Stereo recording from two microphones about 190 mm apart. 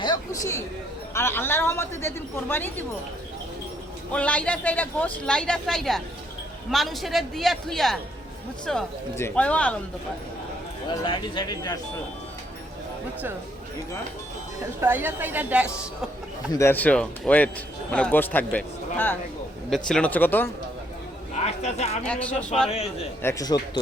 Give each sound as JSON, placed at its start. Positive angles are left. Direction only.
{"t": 0.0, "sound": "a woman's voice", "side_deg": 20}
{"t": 4.1, "sound": "a woman's voice", "side_deg": 5}
{"t": 11.0, "sound": "speech", "side_deg": 25}
{"t": 14.8, "sound": "a woman's voice", "side_deg": -10}
{"t": 16.5, "sound": "a woman's voice", "side_deg": 15}
{"t": 21.3, "sound": "speech", "side_deg": 35}
{"t": 22.0, "sound": "a man's voice", "side_deg": 5}
{"t": 23.2, "sound": "speech", "side_deg": 20}